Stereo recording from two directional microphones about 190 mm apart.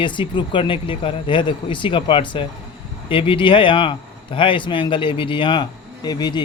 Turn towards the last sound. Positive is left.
turn(degrees=20)  # may be behind; listen again after turning